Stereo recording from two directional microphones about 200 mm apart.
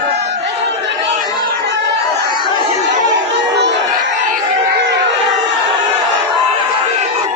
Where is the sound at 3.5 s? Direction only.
60° right (ahead or behind).